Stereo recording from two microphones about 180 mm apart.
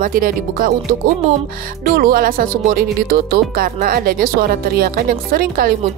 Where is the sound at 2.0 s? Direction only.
55° right (ahead or behind).